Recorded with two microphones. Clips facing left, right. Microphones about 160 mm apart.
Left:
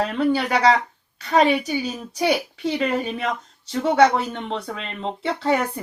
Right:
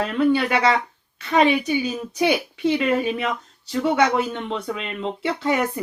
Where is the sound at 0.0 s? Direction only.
35° left (ahead or behind).